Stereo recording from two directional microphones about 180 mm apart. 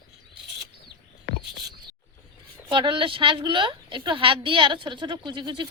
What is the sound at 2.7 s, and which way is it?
A woman's voice, 30° right (ahead or behind).